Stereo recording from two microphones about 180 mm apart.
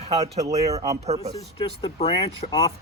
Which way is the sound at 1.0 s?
35° right (ahead or behind).